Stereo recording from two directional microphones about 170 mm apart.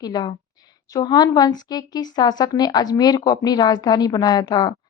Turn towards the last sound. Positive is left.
turn(degrees=25)  # may be behind; listen again after turning